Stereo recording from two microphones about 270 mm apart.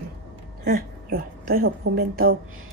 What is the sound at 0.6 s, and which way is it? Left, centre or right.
A woman's voice, right.